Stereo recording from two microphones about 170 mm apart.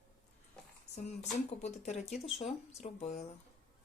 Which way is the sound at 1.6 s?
40° left (ahead or behind).